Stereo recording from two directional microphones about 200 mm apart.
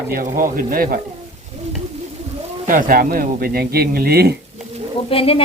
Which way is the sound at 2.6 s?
40° right (ahead or behind).